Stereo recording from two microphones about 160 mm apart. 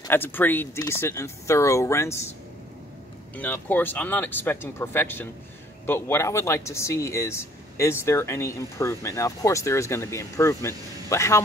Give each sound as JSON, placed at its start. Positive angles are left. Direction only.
{"t": 0.1, "sound": "speech", "side_deg": 10}
{"t": 3.3, "sound": "speech", "side_deg": 10}